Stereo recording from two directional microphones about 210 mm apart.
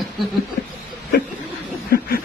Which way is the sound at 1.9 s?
45° left (ahead or behind).